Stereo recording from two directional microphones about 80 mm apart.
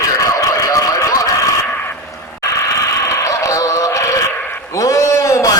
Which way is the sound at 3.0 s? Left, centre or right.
Left.